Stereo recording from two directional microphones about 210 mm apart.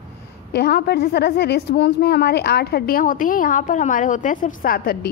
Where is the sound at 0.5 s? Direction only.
50° left (ahead or behind).